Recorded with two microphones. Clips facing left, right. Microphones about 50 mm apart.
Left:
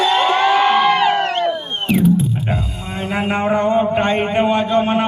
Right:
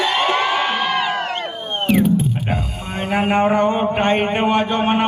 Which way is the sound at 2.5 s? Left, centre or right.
Centre.